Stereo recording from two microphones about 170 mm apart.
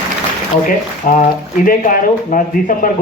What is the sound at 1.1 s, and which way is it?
Speech, 55° left (ahead or behind).